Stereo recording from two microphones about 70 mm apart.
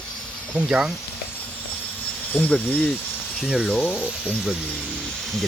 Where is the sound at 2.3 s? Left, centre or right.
Left.